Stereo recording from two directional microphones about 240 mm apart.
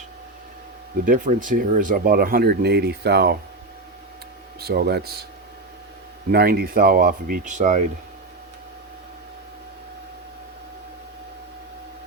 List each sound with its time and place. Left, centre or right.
1.0 s speech: right
4.6 s speech: right
6.3 s speech: right